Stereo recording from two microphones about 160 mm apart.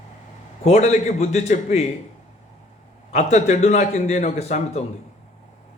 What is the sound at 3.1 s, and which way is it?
A man's voice, 45° left (ahead or behind).